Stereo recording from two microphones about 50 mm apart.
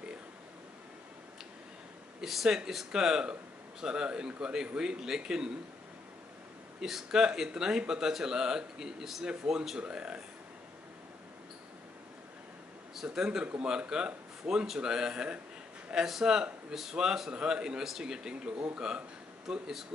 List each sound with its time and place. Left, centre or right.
2.2 s speech: centre
6.8 s speech: centre
12.9 s a man's voice: centre